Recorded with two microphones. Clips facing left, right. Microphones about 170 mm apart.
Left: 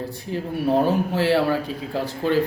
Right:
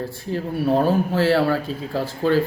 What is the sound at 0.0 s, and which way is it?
A man's voice, 15° left (ahead or behind).